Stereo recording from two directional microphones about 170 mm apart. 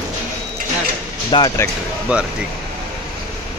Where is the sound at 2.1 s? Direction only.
5° right (ahead or behind).